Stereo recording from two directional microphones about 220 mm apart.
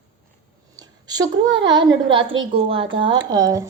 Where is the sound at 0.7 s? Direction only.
20° right (ahead or behind).